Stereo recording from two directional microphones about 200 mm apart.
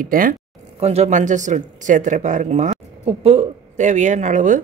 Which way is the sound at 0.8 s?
35° right (ahead or behind).